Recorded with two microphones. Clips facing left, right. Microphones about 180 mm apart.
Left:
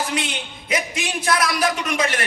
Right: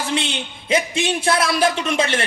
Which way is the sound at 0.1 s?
25° right (ahead or behind).